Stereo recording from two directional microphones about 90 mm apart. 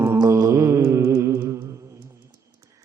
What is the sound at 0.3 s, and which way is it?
Mantra, 35° right (ahead or behind).